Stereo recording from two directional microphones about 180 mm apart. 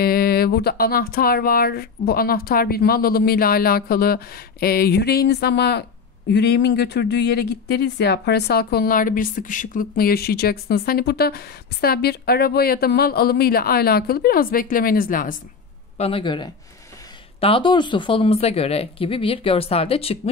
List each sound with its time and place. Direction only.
0.0 s speech: 55° left (ahead or behind)
16.0 s speech: 30° left (ahead or behind)